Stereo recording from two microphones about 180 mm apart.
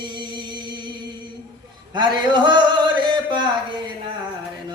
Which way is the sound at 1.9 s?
25° right (ahead or behind).